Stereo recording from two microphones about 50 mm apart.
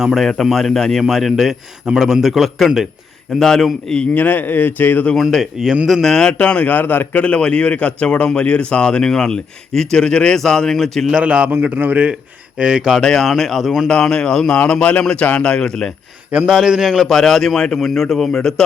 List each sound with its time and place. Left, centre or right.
0.0 s a man's voice: centre
4.1 s speech: left
5.1 s a man's voice: centre
6.3 s speech: left
7.1 s a man's voice: left; by 11.1 s centre
11.2 s a man's voice: right
11.8 s speech: right
12.5 s a man's voice: centre
13.0 s a man's voice: centre
13.8 s a man's voice: centre
14.6 s a man's voice: left
16.5 s a man's voice: centre
16.9 s a man's voice: centre